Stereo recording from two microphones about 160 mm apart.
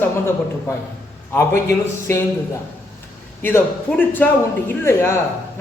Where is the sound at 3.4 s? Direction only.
15° left (ahead or behind).